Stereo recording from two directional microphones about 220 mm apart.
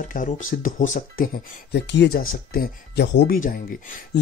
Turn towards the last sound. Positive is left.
turn(degrees=40)  # may be behind; listen again after turning